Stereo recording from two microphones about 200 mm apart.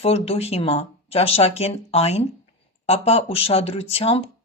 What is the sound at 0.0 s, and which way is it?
Speech, 30° left (ahead or behind).